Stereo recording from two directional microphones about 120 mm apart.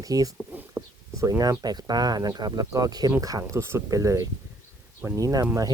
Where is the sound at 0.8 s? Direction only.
10° right (ahead or behind).